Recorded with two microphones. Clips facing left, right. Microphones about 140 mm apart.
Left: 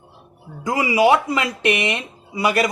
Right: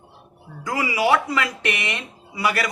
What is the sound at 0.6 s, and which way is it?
Speech, 20° left (ahead or behind).